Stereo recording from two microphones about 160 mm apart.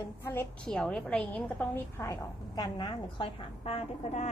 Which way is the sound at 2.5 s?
30° left (ahead or behind).